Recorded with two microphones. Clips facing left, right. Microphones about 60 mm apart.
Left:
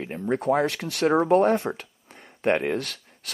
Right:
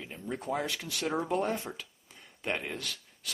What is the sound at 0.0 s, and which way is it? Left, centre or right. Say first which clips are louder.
Speech: left 12 dB; left.